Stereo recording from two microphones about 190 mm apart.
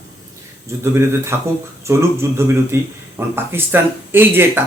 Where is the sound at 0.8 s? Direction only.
15° right (ahead or behind).